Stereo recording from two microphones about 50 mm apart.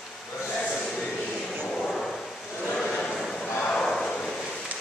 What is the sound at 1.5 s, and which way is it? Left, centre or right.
Vehicle, centre.